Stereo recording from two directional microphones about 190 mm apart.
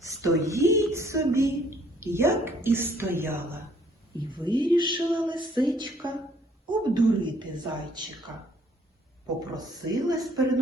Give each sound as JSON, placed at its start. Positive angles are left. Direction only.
{"t": 0.0, "sound": "a woman's voice", "side_deg": -15}
{"t": 4.3, "sound": "a woman's voice", "side_deg": -25}
{"t": 9.6, "sound": "a woman's voice", "side_deg": -20}